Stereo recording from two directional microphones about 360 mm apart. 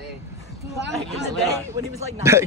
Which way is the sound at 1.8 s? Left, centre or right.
Centre.